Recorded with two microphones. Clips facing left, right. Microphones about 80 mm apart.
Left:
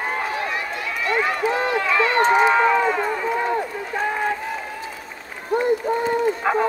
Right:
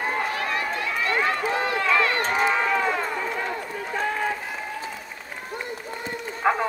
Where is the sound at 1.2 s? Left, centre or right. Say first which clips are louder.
Left 3 dB; left.